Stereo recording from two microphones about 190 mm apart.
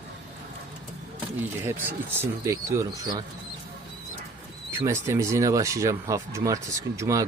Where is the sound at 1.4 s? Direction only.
10° right (ahead or behind).